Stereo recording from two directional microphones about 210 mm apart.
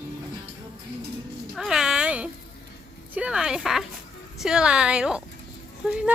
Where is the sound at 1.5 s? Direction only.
Centre (ahead or behind).